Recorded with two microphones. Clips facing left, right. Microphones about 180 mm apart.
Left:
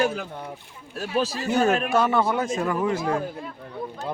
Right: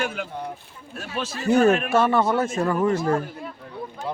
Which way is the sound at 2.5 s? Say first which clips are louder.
Right 3 dB; centre (ahead or behind).